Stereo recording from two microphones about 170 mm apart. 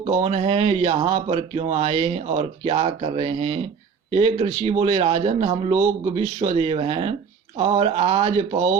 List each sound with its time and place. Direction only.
0.0 s speech: 35° right (ahead or behind)